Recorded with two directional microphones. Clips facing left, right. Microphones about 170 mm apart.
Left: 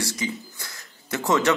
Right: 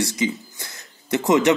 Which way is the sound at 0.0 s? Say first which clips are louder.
Right 6 dB; 20° right (ahead or behind).